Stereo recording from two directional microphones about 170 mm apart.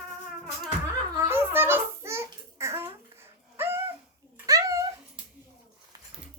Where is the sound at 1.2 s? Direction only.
15° right (ahead or behind).